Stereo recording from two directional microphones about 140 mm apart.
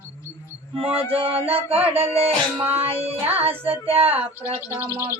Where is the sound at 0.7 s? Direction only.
45° right (ahead or behind).